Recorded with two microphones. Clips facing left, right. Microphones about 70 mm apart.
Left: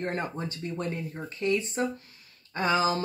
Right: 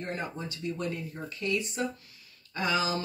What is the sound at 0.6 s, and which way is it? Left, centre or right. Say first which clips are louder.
Speech: right 1 dB; left.